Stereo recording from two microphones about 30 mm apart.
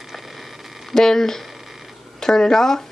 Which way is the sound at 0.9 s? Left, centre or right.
Centre.